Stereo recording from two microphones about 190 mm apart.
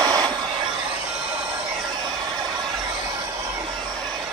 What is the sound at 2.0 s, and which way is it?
Hair dryer, 20° right (ahead or behind).